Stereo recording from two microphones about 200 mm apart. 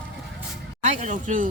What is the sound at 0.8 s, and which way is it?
Speech, 35° right (ahead or behind).